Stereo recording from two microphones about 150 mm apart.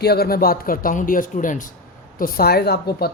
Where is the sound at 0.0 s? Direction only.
90° left; by 1.7 s 60° left (ahead or behind).